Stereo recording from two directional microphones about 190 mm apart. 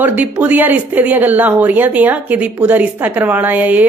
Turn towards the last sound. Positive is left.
turn(degrees=-10)  # may be behind; listen again after turning